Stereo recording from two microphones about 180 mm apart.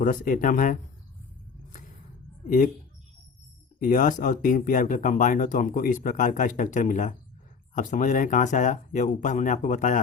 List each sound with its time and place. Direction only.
0.0 s speech: 50° left (ahead or behind)
3.8 s speech: 50° left (ahead or behind)